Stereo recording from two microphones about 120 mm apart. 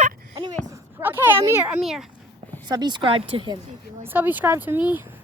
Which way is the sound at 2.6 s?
40° right (ahead or behind).